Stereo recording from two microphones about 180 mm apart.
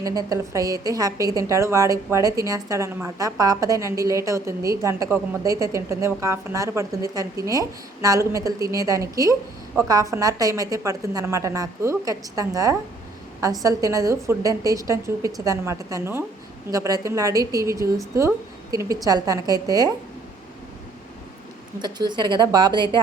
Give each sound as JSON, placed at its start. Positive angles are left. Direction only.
{"t": 0.0, "sound": "a woman's voice", "side_deg": -20}
{"t": 21.8, "sound": "a woman's voice", "side_deg": -25}